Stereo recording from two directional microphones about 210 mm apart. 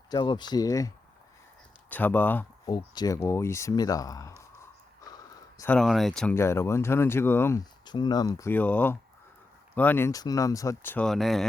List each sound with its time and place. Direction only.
0.1 s speech: 20° left (ahead or behind)
2.6 s speech: 20° left (ahead or behind)
4.9 s a sound: 15° left (ahead or behind)
5.7 s speech: centre (ahead or behind); by 8.3 s 20° left (ahead or behind)
8.4 s speech: 10° left (ahead or behind)